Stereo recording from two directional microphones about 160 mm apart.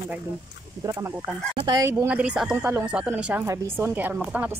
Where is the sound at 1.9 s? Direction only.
5° right (ahead or behind).